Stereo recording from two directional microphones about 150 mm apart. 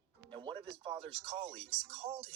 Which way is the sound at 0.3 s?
35° right (ahead or behind).